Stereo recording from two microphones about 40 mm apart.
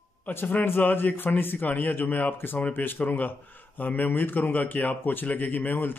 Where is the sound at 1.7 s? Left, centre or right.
Left.